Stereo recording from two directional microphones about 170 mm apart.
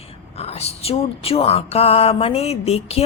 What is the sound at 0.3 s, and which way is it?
Speech, 35° left (ahead or behind).